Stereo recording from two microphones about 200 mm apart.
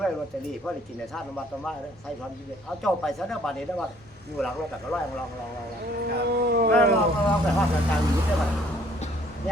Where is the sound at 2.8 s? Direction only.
Centre (ahead or behind).